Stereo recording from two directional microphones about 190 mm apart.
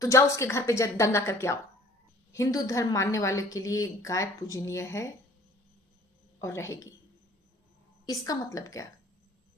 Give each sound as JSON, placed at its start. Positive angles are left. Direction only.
{"t": 0.0, "sound": "a woman's voice", "side_deg": 15}
{"t": 6.4, "sound": "a woman's voice", "side_deg": 15}
{"t": 8.0, "sound": "a woman's voice", "side_deg": 20}